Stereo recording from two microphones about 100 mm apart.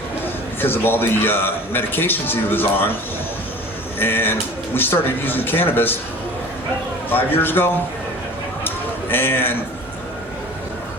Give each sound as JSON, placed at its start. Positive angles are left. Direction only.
{"t": 0.6, "sound": "a man's voice", "side_deg": 20}
{"t": 4.0, "sound": "a man's voice", "side_deg": 20}
{"t": 7.1, "sound": "a man's voice", "side_deg": 20}
{"t": 8.6, "sound": "a sound", "side_deg": 20}